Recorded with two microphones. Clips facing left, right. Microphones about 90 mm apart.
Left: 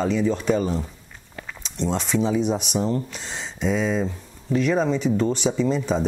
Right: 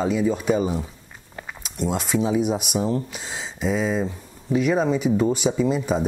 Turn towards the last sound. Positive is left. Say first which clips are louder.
# even
turn(degrees=-5)  # may be behind; listen again after turning